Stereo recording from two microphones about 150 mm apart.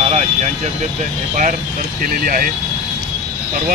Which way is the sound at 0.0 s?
45° right (ahead or behind).